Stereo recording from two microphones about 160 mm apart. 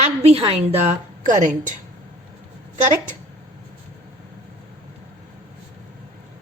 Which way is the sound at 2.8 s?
50° right (ahead or behind).